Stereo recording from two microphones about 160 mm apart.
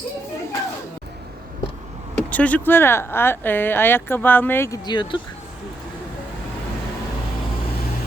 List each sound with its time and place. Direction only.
2.1 s speech: 10° left (ahead or behind)
4.9 s speech: 30° left (ahead or behind)